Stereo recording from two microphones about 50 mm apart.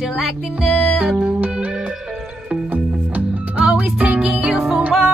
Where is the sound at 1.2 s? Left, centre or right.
Right.